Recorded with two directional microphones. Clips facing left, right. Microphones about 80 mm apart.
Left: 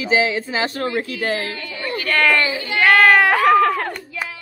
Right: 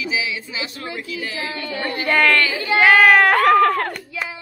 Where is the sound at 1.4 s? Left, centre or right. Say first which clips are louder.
Right 2 dB; right.